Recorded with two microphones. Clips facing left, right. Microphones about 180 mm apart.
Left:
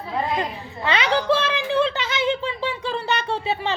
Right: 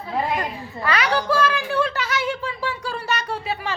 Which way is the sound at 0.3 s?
25° left (ahead or behind).